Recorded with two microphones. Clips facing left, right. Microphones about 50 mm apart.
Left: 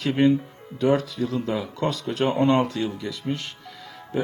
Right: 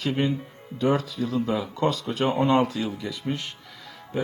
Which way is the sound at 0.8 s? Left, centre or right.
Centre.